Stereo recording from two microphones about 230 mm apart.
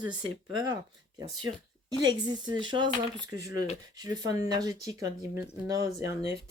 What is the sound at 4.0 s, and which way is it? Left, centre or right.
Speech, centre.